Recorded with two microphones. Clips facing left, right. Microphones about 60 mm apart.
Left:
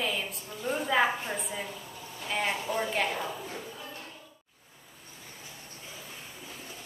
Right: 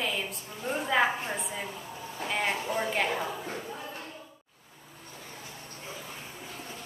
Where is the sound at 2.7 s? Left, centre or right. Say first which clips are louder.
Right 1 dB; centre.